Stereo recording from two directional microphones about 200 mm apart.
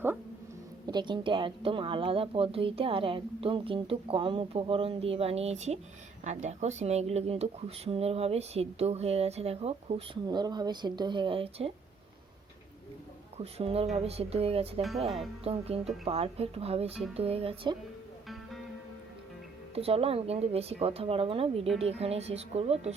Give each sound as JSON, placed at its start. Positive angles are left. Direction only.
{"t": 0.9, "sound": "a woman's voice", "side_deg": -20}
{"t": 13.3, "sound": "a woman's voice", "side_deg": -30}
{"t": 14.8, "sound": "speech", "side_deg": 0}
{"t": 15.4, "sound": "a woman's voice", "side_deg": -30}
{"t": 19.7, "sound": "a woman's voice", "side_deg": -30}